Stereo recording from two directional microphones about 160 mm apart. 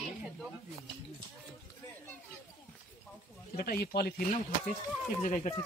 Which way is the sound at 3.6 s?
70° left (ahead or behind).